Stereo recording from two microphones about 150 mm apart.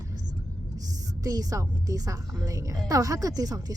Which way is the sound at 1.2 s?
25° right (ahead or behind).